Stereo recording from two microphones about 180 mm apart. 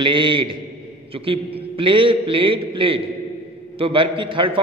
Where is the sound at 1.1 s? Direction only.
30° right (ahead or behind).